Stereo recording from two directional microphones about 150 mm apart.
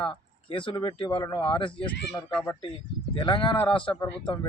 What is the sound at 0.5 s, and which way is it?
Speech, 35° left (ahead or behind).